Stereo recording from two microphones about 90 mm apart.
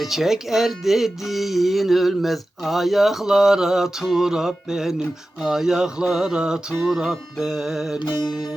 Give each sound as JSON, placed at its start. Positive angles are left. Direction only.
{"t": 0.0, "sound": "speech", "side_deg": 0}
{"t": 7.9, "sound": "music", "side_deg": 55}